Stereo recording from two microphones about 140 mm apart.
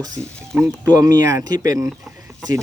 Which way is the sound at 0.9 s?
25° right (ahead or behind).